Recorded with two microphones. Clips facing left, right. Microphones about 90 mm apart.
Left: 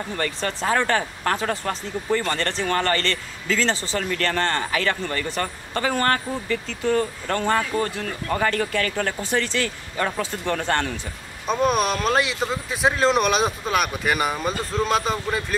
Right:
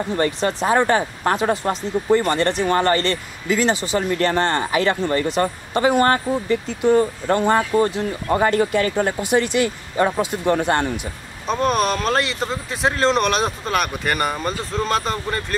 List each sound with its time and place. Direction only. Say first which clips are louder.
0.1 s speech: right 7 dB; 20° right (ahead or behind)
11.4 s speech: right 1 dB; centre (ahead or behind)